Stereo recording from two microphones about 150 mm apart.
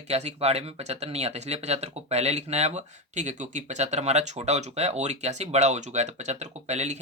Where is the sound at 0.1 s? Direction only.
45° right (ahead or behind).